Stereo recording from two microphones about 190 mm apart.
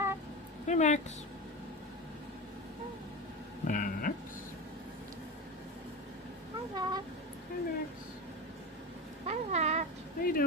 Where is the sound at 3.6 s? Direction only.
45° left (ahead or behind).